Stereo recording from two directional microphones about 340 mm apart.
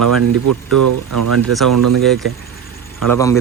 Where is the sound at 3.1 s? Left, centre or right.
Centre.